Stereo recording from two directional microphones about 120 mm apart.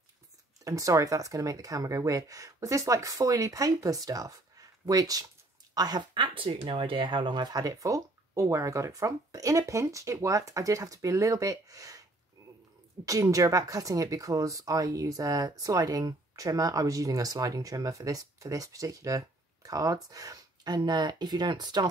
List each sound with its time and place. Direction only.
0.7 s speech: 25° right (ahead or behind)
12.4 s a sound: 30° right (ahead or behind)
13.0 s speech: 30° right (ahead or behind)